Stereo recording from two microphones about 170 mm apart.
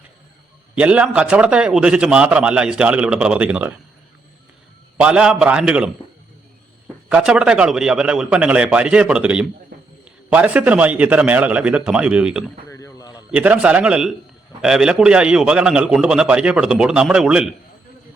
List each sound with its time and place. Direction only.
0.8 s a man's voice: 5° right (ahead or behind)
4.9 s a man's voice: 5° right (ahead or behind)
7.1 s a man's voice: 5° right (ahead or behind)
12.6 s a sound: 15° left (ahead or behind)
13.3 s a man's voice: 5° right (ahead or behind)